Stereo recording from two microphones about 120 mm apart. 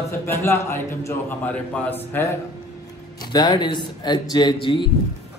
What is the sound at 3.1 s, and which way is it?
A man's voice, 35° left (ahead or behind).